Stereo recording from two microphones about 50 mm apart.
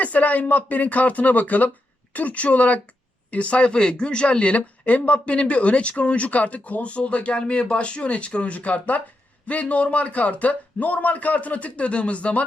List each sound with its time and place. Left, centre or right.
0.0 s speech: left